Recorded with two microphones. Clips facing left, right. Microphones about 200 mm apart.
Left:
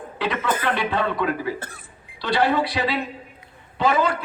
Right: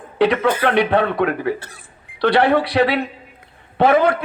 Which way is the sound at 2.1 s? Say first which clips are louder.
Right 6 dB; 60° right (ahead or behind).